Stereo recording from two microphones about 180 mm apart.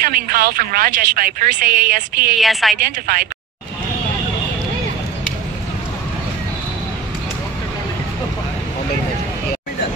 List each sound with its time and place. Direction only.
0.0 s a woman's voice: 55° right (ahead or behind)
2.3 s a woman's voice: centre (ahead or behind)
2.8 s a woman's voice: 55° right (ahead or behind)